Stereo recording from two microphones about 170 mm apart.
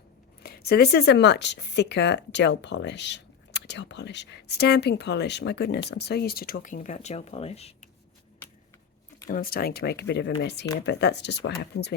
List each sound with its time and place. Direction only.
0.4 s speech: 65° left (ahead or behind); by 7.9 s 35° left (ahead or behind)
9.2 s speech: 55° left (ahead or behind); by 11.9 s 80° left